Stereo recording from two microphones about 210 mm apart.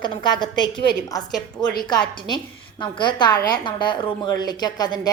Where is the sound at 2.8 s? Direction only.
20° left (ahead or behind).